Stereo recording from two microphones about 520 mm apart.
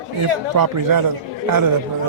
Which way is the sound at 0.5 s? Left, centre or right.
Right.